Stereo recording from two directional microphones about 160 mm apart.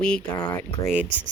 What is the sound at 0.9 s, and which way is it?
Speech, 10° right (ahead or behind).